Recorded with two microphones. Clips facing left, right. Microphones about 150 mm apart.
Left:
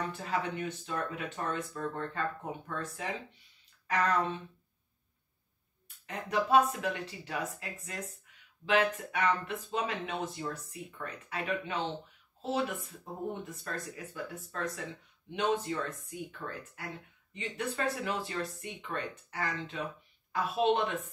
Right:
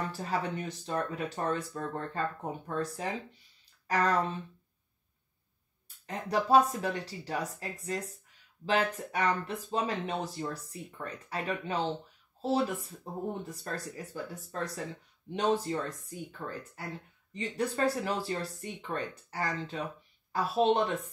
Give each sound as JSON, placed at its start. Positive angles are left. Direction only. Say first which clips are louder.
{"t": 0.1, "sound": "speech", "louder": "right 1 dB", "side_deg": -40}
{"t": 6.0, "sound": "speech", "louder": "right 2 dB", "side_deg": -35}